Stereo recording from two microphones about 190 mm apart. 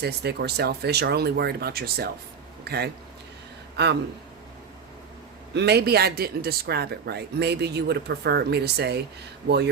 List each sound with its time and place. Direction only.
0.0 s speech: 60° right (ahead or behind)
5.5 s speech: 60° right (ahead or behind)